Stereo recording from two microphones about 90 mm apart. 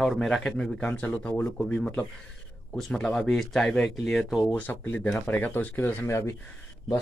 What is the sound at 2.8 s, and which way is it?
Speech, 5° left (ahead or behind).